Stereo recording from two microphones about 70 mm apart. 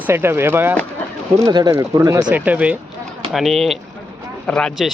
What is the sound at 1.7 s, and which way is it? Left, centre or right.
Speech, right.